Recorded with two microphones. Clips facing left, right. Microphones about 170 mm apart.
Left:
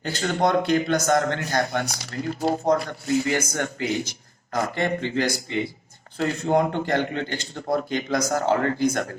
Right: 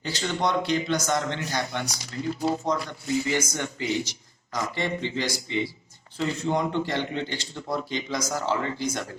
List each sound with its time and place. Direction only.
0.0 s a man's voice: 50° left (ahead or behind)